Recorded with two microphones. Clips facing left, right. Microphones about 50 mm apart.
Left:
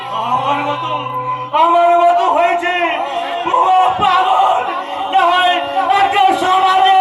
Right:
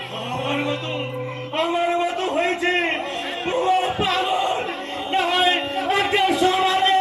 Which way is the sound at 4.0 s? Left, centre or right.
Left.